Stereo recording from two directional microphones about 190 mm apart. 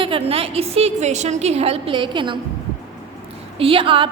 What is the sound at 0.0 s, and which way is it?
A woman's voice, 30° right (ahead or behind).